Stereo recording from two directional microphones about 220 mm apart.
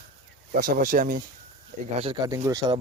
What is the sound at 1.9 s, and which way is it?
Speech, 20° right (ahead or behind).